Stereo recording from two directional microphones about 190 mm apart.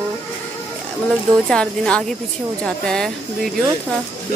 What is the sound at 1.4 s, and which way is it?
Speech, 5° left (ahead or behind).